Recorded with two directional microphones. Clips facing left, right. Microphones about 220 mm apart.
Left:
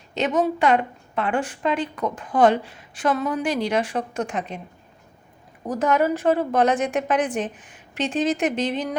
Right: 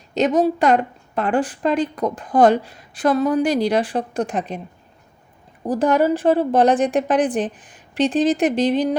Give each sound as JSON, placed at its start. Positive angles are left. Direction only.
{"t": 0.1, "sound": "a woman's voice", "side_deg": -40}
{"t": 5.6, "sound": "a woman's voice", "side_deg": -30}